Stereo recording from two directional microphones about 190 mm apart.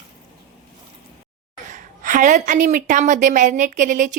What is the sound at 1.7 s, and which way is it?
A woman's voice, 45° right (ahead or behind).